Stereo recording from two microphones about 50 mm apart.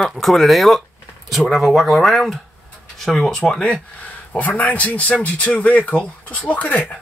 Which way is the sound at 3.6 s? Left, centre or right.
Left.